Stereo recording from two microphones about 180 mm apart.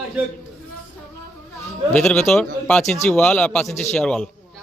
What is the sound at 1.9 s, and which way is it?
Speech, centre (ahead or behind).